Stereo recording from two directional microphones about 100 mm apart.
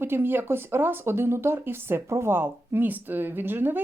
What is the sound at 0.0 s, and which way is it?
Speech, 20° right (ahead or behind).